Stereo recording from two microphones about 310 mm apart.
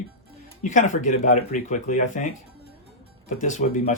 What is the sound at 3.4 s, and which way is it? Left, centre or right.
Speech, left.